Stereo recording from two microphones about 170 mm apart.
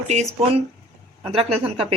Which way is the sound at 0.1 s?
40° right (ahead or behind).